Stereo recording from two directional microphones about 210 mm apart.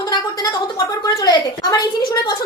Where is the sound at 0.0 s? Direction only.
20° left (ahead or behind).